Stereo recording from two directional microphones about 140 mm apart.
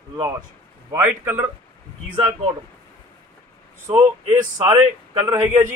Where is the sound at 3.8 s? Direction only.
20° right (ahead or behind).